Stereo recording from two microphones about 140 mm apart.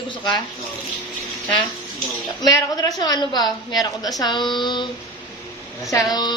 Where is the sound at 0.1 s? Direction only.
30° left (ahead or behind).